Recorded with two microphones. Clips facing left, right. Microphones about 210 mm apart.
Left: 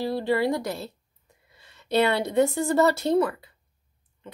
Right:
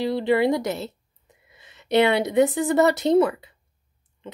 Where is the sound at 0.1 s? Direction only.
20° right (ahead or behind).